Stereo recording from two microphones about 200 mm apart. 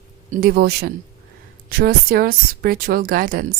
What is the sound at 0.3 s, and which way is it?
A woman's voice, 45° right (ahead or behind).